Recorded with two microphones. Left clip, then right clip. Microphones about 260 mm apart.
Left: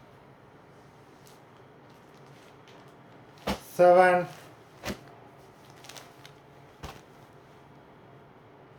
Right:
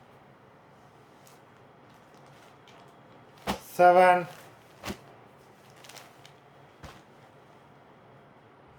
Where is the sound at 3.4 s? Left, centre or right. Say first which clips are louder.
Even; centre.